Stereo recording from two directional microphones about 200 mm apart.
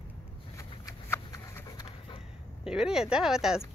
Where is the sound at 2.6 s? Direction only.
5° right (ahead or behind).